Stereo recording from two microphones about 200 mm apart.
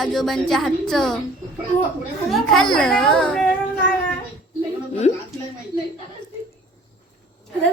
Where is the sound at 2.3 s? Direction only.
Centre (ahead or behind).